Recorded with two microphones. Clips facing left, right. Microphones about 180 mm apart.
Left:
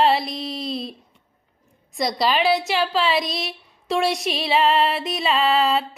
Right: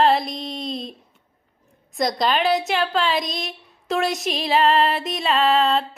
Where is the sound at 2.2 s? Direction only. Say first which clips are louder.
Left 1 dB; centre (ahead or behind).